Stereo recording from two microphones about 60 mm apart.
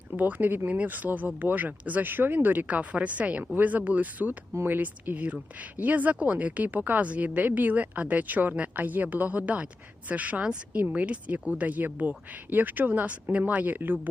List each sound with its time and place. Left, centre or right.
0.1 s speech: right